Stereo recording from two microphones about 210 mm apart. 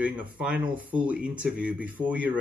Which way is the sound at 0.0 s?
5° right (ahead or behind).